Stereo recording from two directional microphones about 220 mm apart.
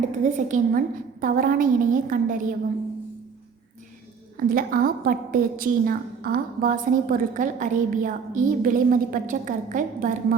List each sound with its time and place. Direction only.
0.3 s a woman's voice: 35° right (ahead or behind)
4.4 s a woman's voice: 40° right (ahead or behind)